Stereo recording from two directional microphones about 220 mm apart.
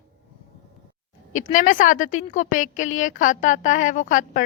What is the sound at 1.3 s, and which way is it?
A woman's voice, 35° left (ahead or behind).